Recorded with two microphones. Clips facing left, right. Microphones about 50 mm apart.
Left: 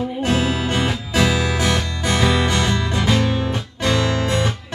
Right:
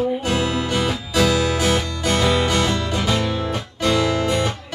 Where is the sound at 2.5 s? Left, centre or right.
Centre.